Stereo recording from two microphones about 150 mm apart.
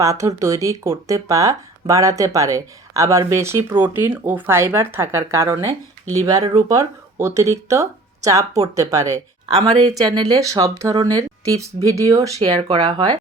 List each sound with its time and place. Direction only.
0.0 s speech: 20° right (ahead or behind)